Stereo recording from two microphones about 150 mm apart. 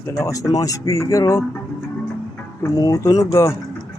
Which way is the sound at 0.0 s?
20° left (ahead or behind).